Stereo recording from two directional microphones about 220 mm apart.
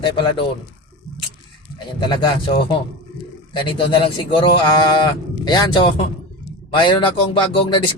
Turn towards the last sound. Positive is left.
turn(degrees=25)  # may be behind; listen again after turning